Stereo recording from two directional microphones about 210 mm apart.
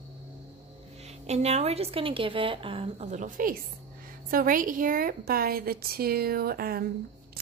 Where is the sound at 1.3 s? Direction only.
30° right (ahead or behind).